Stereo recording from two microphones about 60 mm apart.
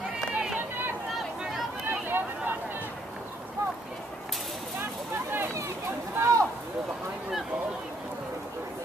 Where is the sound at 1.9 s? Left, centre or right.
Right.